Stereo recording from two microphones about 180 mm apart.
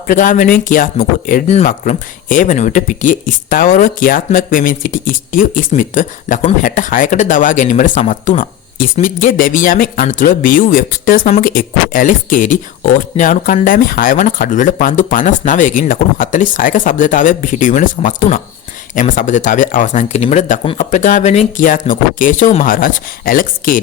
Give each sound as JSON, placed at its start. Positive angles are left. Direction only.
{"t": 0.1, "sound": "speech", "side_deg": 45}